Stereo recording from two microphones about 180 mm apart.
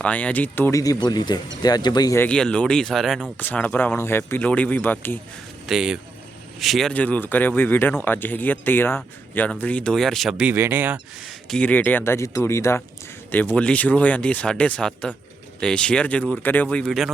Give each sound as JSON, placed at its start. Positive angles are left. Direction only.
{"t": 0.0, "sound": "speech", "side_deg": 5}
{"t": 2.2, "sound": "speech", "side_deg": 5}
{"t": 5.6, "sound": "speech", "side_deg": -5}